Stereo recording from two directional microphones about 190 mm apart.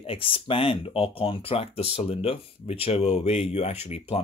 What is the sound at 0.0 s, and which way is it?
Speech, 30° left (ahead or behind).